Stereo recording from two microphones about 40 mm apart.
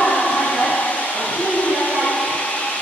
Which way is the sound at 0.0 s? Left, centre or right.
Left.